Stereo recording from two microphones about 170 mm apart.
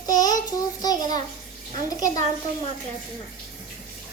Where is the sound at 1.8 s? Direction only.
20° left (ahead or behind).